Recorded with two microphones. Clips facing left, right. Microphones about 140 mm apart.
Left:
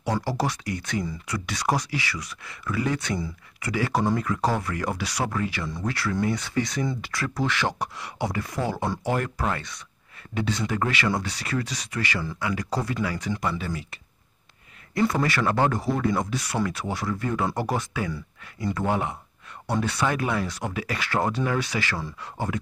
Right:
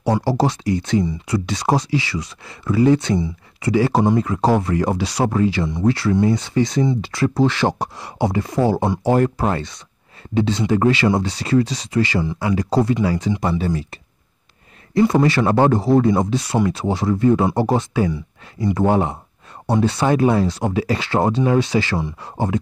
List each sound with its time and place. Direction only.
0.0 s speech: 30° right (ahead or behind)
15.0 s speech: 25° right (ahead or behind)
18.8 s speech: 30° right (ahead or behind)